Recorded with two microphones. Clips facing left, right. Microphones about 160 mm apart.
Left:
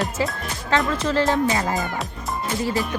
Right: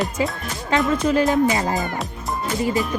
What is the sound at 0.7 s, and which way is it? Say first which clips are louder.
Speech: right 3 dB; 15° right (ahead or behind).